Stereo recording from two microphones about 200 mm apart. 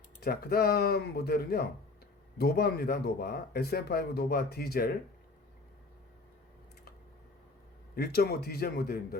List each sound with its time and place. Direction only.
0.2 s speech: 50° left (ahead or behind)
7.9 s speech: 50° left (ahead or behind)